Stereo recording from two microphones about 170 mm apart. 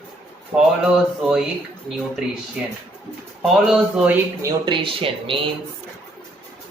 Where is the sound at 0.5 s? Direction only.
5° right (ahead or behind).